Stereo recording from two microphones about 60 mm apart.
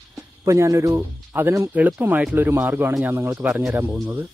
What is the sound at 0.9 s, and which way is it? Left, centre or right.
Speech, right.